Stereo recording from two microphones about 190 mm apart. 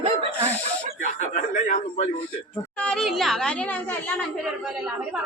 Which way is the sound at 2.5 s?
5° left (ahead or behind).